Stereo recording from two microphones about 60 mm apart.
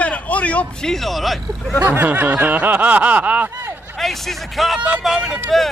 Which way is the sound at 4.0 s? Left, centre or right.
Centre.